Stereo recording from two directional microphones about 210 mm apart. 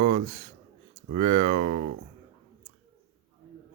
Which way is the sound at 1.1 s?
30° right (ahead or behind).